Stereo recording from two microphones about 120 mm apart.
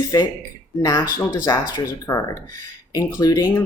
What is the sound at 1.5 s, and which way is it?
Speech, 25° left (ahead or behind).